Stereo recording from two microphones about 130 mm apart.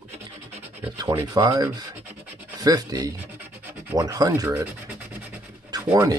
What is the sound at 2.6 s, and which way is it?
Speech, 30° right (ahead or behind).